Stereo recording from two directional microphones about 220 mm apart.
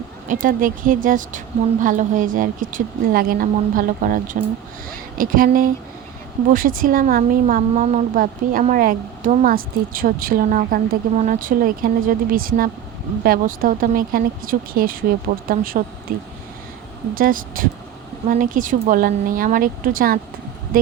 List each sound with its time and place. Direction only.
0.3 s speech: 40° right (ahead or behind)